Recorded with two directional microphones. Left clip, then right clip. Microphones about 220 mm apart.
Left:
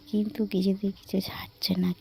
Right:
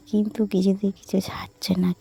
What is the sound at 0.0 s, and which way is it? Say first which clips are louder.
Speech: right 5 dB; 30° right (ahead or behind).